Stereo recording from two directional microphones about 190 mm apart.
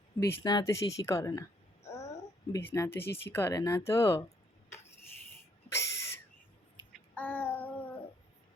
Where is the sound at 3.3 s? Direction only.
15° left (ahead or behind).